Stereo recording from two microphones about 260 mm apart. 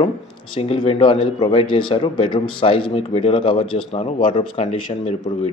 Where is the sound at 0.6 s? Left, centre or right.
Left.